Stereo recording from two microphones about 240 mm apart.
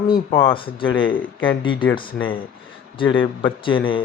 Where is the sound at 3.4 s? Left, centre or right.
Left.